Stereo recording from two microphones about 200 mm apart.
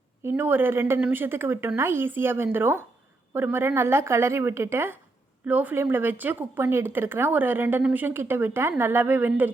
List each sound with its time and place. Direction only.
0.2 s speech: 10° right (ahead or behind)